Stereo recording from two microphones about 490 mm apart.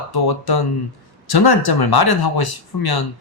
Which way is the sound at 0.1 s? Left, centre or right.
Left.